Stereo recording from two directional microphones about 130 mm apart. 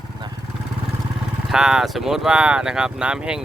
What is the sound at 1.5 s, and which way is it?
Speech, 5° right (ahead or behind).